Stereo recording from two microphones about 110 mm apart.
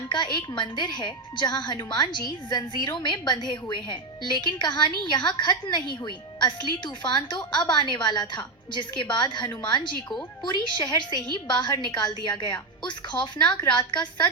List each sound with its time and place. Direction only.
0.1 s a woman's voice: 45° left (ahead or behind)